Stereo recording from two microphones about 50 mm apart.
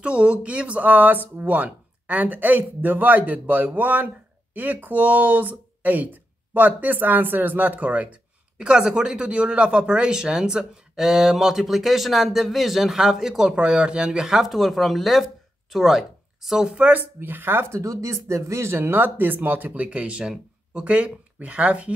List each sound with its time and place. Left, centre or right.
0.0 s speech: right; by 16.6 s centre
16.6 s speech: right
16.9 s speech: right